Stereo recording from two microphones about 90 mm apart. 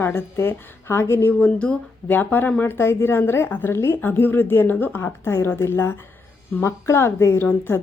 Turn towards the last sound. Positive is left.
turn(degrees=25)  # may be behind; listen again after turning